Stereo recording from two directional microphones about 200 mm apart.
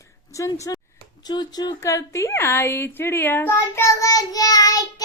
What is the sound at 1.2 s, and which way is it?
A woman's voice, 20° left (ahead or behind).